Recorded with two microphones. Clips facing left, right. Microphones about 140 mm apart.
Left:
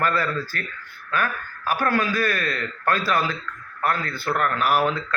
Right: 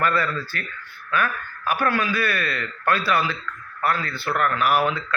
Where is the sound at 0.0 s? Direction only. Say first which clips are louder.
Even; 40° left (ahead or behind).